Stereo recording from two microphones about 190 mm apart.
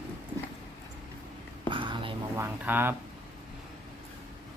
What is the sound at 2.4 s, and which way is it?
Speech, 10° right (ahead or behind).